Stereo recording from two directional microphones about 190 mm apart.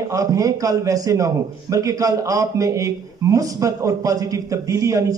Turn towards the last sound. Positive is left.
turn(degrees=-15)  # may be behind; listen again after turning